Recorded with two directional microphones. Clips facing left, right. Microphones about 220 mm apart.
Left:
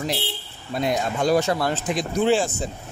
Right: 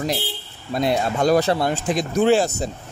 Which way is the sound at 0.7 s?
35° right (ahead or behind).